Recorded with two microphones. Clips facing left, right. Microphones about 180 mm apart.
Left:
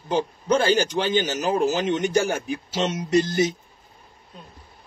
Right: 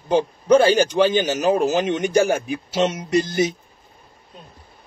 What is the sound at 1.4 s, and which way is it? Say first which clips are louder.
Speech: right 5 dB; 20° right (ahead or behind).